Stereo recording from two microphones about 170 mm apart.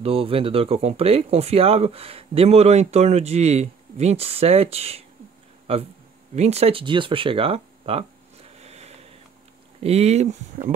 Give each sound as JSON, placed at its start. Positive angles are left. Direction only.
{"t": 0.0, "sound": "speech", "side_deg": -35}